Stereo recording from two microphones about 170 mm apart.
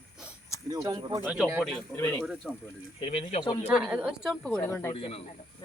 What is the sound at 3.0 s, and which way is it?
Speech, 30° left (ahead or behind).